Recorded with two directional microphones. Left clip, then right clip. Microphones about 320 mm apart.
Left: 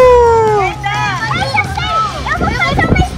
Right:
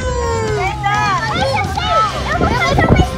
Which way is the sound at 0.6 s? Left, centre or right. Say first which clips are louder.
Even; right.